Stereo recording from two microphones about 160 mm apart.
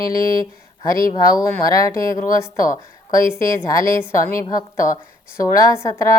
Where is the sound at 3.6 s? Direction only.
20° left (ahead or behind).